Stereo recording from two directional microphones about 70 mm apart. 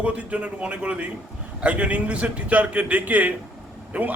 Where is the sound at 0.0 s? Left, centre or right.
Centre.